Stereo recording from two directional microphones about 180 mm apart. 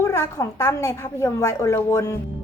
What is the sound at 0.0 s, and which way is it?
A woman's voice, 15° left (ahead or behind).